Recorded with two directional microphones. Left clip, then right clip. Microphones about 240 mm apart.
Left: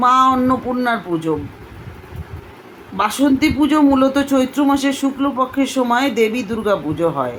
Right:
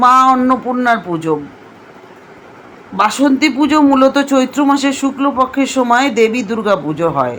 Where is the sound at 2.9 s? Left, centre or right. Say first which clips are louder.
Right 4 dB; centre.